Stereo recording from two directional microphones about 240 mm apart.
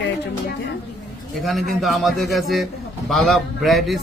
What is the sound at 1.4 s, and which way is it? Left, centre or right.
A man's voice, centre.